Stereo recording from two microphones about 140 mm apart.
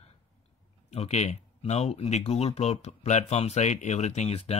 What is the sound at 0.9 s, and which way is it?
Speech, 50° left (ahead or behind).